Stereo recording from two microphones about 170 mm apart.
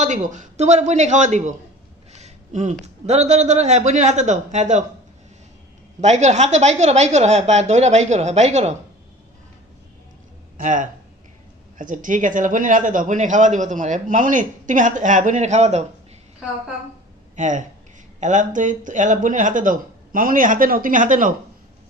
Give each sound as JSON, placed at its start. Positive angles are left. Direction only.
{"t": 0.0, "sound": "speech", "side_deg": -45}
{"t": 2.1, "sound": "a sound", "side_deg": -45}
{"t": 2.8, "sound": "speech", "side_deg": -40}
{"t": 6.0, "sound": "speech", "side_deg": -40}
{"t": 10.6, "sound": "speech", "side_deg": -50}
{"t": 17.3, "sound": "speech", "side_deg": -45}